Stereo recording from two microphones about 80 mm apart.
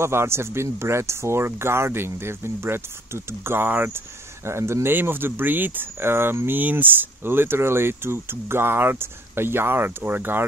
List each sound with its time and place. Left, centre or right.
0.0 s speech: right